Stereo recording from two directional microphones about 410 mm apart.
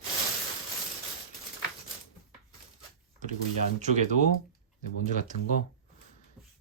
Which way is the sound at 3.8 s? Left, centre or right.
Centre.